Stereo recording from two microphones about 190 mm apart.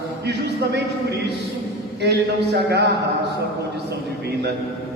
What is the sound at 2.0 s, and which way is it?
Speech, 60° right (ahead or behind).